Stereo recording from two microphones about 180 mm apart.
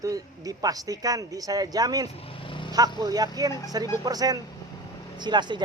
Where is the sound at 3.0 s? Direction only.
20° right (ahead or behind).